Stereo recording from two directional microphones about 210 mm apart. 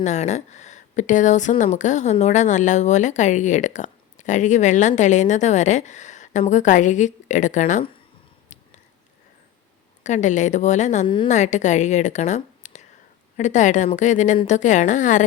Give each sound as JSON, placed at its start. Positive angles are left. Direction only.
{"t": 0.0, "sound": "a woman's voice", "side_deg": 35}
{"t": 8.5, "sound": "a sound", "side_deg": 35}
{"t": 10.0, "sound": "a woman's voice", "side_deg": 35}